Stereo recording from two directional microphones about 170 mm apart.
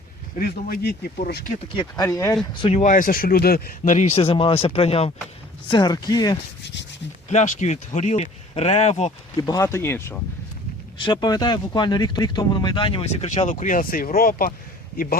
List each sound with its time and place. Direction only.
0.3 s speech: 60° left (ahead or behind)
1.7 s speech: 30° left (ahead or behind)
2.0 s speech: 15° left (ahead or behind)
2.6 s speech: 35° left (ahead or behind); by 3.8 s 60° left (ahead or behind)
3.8 s speech: 45° left (ahead or behind)
5.6 s speech: 25° left (ahead or behind)
7.3 s speech: 45° left (ahead or behind)
9.5 s speech: 20° left (ahead or behind)
10.9 s speech: 25° left (ahead or behind); by 14.5 s 55° left (ahead or behind)